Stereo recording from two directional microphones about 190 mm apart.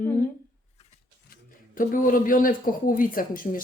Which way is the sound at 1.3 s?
45° left (ahead or behind).